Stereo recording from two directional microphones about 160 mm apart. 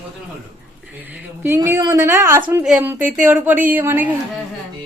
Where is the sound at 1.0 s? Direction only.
10° right (ahead or behind).